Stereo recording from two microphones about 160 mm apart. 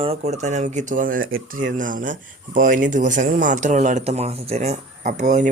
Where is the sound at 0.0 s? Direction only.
40° right (ahead or behind).